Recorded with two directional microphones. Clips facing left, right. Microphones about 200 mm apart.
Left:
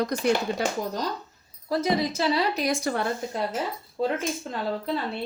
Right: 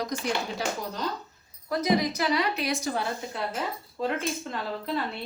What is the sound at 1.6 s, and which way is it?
A woman's voice, 30° left (ahead or behind).